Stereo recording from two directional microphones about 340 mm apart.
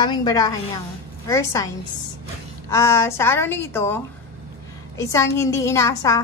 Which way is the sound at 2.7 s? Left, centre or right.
Centre.